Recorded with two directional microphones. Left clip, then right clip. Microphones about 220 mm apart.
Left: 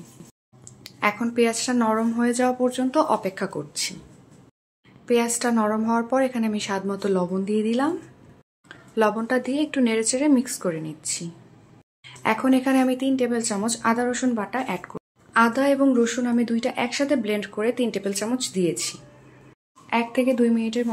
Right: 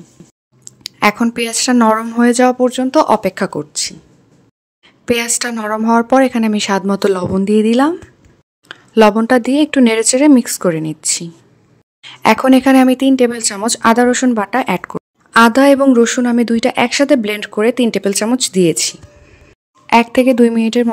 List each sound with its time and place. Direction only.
0.7 s speech: 50° right (ahead or behind)
5.0 s speech: 45° right (ahead or behind)